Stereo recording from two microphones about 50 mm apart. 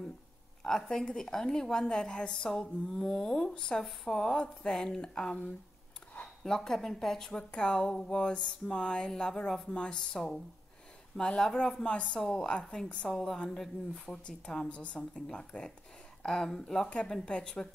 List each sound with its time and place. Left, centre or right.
0.6 s a woman's voice: centre
15.1 s speech: centre